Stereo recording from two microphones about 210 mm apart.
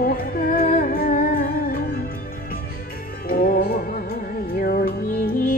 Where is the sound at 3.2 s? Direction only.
40° left (ahead or behind).